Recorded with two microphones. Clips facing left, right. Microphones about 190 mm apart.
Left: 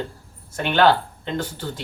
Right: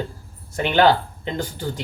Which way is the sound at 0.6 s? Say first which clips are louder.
Right 1 dB; 15° right (ahead or behind).